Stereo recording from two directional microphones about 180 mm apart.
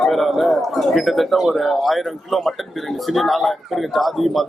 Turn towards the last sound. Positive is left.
turn(degrees=0)  # may be behind; listen again after turning